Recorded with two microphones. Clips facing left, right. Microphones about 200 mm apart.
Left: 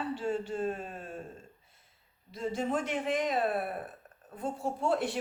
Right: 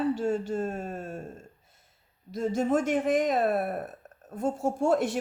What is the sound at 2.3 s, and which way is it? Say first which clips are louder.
A woman's voice: right 6 dB; 45° right (ahead or behind).